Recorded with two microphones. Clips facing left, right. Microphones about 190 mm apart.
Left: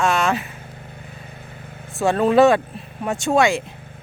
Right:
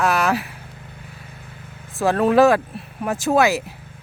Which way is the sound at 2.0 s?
Centre (ahead or behind).